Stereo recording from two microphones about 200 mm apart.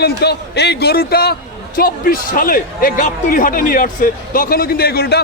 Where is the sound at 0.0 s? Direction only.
55° left (ahead or behind).